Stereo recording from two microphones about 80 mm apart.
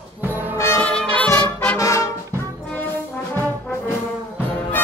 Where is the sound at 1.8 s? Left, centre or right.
Left.